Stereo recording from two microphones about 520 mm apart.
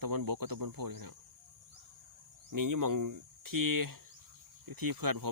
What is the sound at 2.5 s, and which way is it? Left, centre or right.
Speech, right.